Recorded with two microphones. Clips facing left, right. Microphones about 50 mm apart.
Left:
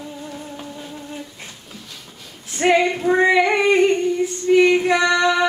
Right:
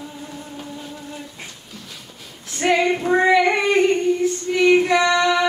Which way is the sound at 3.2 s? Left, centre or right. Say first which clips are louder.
Even; centre.